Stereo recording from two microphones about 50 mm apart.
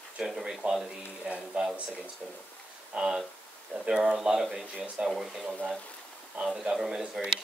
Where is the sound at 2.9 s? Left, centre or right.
Centre.